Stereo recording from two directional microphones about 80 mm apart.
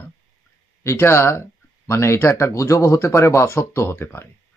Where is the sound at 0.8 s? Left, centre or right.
Left.